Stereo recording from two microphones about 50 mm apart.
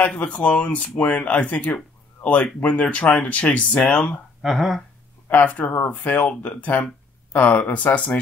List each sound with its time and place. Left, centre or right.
0.0 s speech: left
4.4 s speech: centre
5.4 s speech: left